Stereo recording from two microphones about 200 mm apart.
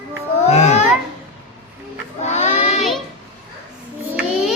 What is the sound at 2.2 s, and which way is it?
Child singing, 35° left (ahead or behind).